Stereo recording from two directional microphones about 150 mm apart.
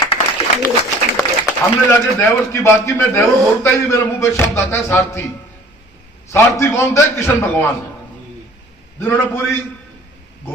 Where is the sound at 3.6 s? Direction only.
20° left (ahead or behind).